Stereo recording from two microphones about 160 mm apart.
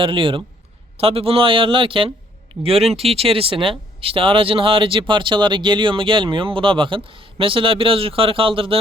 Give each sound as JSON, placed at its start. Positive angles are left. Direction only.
{"t": 0.0, "sound": "speech", "side_deg": -30}